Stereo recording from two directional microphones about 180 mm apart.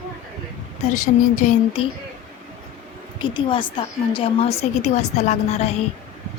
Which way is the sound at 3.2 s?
25° left (ahead or behind).